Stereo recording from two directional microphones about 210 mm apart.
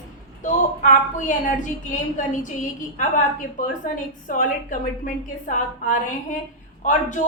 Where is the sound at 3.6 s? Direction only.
40° left (ahead or behind).